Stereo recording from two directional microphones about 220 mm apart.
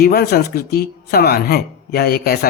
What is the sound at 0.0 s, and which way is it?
Speech, 45° left (ahead or behind).